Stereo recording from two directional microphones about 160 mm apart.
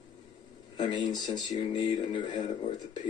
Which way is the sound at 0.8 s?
30° left (ahead or behind).